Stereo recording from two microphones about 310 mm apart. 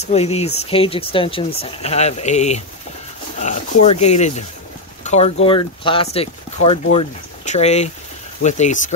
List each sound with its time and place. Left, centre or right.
0.0 s speech: centre
3.8 s speech: left